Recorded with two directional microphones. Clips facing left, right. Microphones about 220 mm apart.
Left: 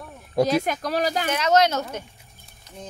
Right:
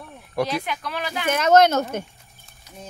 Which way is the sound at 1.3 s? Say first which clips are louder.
Right 5 dB; 50° right (ahead or behind).